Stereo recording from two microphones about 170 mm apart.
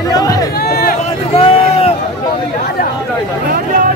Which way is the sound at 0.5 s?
65° left (ahead or behind).